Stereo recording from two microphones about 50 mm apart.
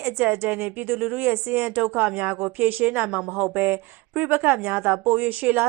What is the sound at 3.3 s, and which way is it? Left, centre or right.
A woman's voice, right.